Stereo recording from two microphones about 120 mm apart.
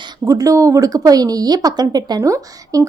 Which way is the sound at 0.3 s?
30° right (ahead or behind).